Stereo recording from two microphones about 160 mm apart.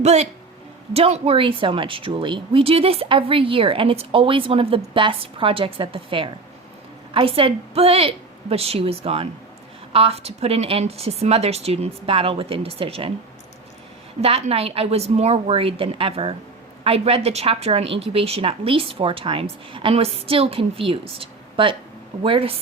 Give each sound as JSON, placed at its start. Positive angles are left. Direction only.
{"t": 0.0, "sound": "speech", "side_deg": -45}
{"t": 14.2, "sound": "speech", "side_deg": -40}